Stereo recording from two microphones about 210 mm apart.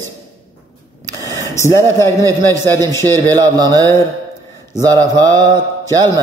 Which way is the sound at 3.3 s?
20° right (ahead or behind).